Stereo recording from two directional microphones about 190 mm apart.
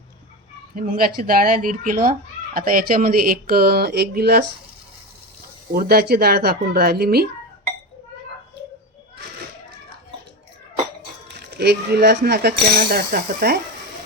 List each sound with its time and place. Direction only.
0.8 s speech: 50° right (ahead or behind)
5.7 s speech: 55° right (ahead or behind)
11.5 s speech: 60° right (ahead or behind)